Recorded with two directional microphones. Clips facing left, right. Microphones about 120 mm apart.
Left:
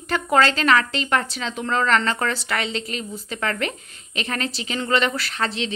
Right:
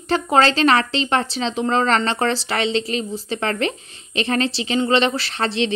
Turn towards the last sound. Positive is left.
turn(degrees=-30)  # may be behind; listen again after turning